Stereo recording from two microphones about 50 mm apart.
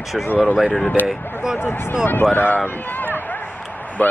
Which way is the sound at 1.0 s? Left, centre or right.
Centre.